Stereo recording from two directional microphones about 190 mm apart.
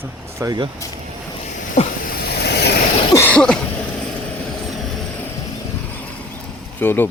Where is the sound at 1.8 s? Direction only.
35° left (ahead or behind).